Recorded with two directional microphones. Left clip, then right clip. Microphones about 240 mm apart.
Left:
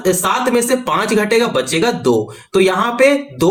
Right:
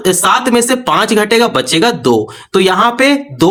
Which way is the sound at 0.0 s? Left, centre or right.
Right.